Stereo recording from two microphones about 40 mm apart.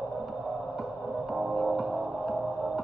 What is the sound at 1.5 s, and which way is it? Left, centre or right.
Music, centre.